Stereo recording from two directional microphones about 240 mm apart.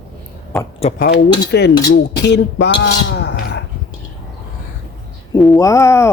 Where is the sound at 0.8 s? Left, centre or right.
Left.